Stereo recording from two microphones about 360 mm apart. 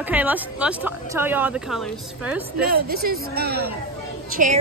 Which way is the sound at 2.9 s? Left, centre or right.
Right.